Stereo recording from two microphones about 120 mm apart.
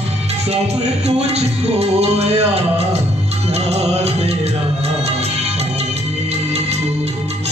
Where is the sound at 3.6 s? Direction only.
60° right (ahead or behind).